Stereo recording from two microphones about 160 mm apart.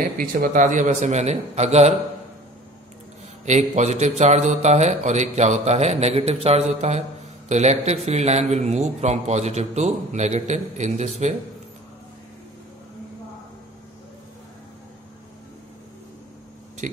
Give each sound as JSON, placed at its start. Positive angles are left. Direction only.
{"t": 0.2, "sound": "a man's voice", "side_deg": -60}
{"t": 3.4, "sound": "a man's voice", "side_deg": -45}
{"t": 16.8, "sound": "a man's voice", "side_deg": -50}